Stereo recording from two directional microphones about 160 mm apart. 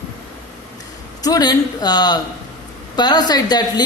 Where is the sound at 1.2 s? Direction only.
25° left (ahead or behind).